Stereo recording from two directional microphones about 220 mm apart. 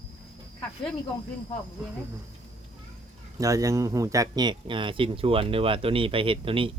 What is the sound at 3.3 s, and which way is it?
Speech, 15° right (ahead or behind).